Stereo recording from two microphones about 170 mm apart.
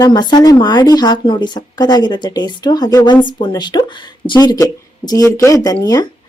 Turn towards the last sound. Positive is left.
turn(degrees=20)  # may be behind; listen again after turning